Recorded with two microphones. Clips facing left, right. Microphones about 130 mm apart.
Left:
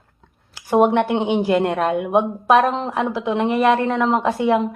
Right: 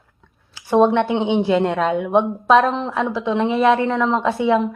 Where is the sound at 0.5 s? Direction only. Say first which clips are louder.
Right 1 dB; 15° left (ahead or behind).